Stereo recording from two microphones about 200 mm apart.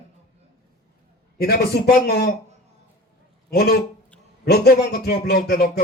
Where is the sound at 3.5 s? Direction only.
50° left (ahead or behind).